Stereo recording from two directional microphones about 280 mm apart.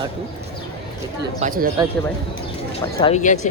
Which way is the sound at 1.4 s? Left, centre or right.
Right.